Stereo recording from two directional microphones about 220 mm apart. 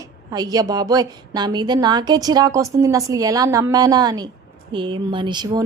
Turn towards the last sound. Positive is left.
turn(degrees=-20)  # may be behind; listen again after turning